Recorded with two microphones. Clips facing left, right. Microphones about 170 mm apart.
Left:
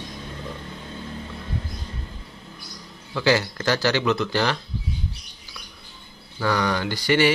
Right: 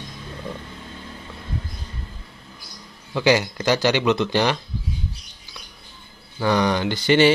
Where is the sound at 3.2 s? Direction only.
15° right (ahead or behind).